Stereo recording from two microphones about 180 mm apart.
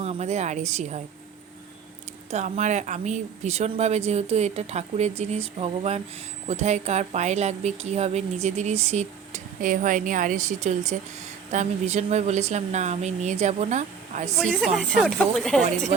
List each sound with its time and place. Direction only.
0.0 s a woman's voice: 35° right (ahead or behind)
2.3 s a woman's voice: 40° right (ahead or behind)
14.3 s speech: centre (ahead or behind)